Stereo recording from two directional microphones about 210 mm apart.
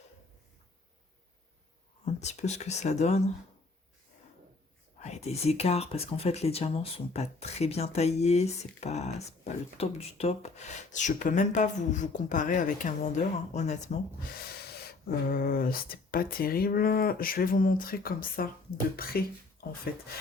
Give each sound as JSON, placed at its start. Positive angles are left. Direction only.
{"t": 2.1, "sound": "speech", "side_deg": 30}
{"t": 4.9, "sound": "speech", "side_deg": 30}
{"t": 14.7, "sound": "speech", "side_deg": 45}